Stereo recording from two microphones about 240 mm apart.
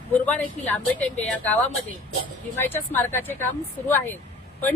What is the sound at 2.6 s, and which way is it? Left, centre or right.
Speech, centre.